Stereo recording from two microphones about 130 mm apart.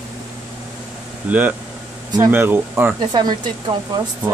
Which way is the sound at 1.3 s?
10° right (ahead or behind).